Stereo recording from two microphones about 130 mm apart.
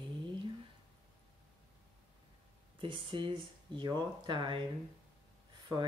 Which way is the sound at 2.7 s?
40° right (ahead or behind).